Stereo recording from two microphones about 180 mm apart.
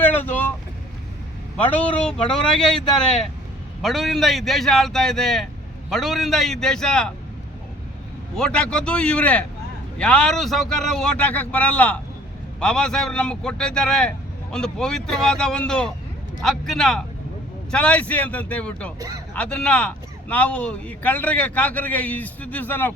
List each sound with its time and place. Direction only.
0.0 s vehicle: 10° left (ahead or behind)
1.7 s a man's voice: 5° left (ahead or behind)
8.4 s a man's voice: 5° left (ahead or behind)
18.9 s speech: 20° right (ahead or behind)
19.3 s speech: 5° left (ahead or behind)